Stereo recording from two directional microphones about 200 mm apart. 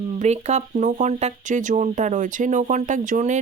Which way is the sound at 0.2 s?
35° right (ahead or behind).